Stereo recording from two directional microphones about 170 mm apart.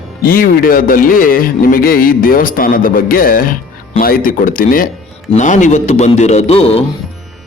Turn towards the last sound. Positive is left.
turn(degrees=35)  # may be behind; listen again after turning